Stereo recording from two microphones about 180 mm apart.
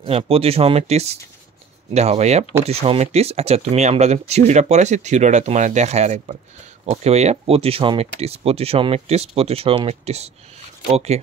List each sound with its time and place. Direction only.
0.0 s speech: 30° right (ahead or behind)